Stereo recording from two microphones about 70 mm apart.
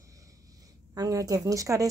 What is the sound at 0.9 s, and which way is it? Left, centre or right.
Speech, right.